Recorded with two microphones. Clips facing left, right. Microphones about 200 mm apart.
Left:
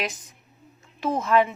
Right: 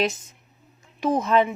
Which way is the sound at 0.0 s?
25° right (ahead or behind).